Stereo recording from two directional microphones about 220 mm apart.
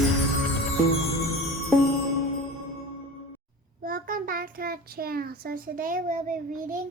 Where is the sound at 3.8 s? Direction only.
40° right (ahead or behind).